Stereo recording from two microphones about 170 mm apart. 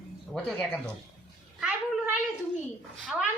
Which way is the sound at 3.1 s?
5° right (ahead or behind).